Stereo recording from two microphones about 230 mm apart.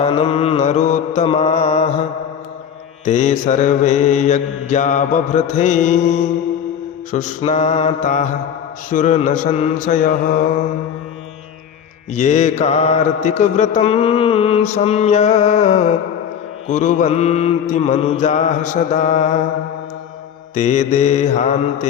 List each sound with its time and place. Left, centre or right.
0.0 s mantra: left
3.0 s mantra: left
12.1 s mantra: left
20.6 s mantra: left